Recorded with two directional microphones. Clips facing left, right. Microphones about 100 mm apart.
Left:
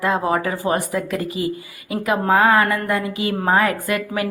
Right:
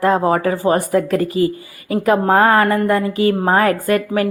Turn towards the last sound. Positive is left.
turn(degrees=-40)  # may be behind; listen again after turning